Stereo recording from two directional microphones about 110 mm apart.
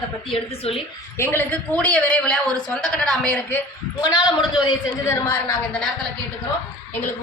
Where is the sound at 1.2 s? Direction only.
20° left (ahead or behind).